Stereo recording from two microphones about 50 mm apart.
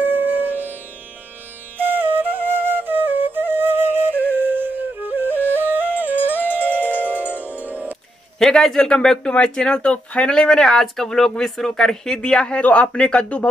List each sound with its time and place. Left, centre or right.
0.0 s music: right
1.8 s flute: right
4.1 s music: left
4.4 s music: right
8.4 s speech: centre; by 13.5 s left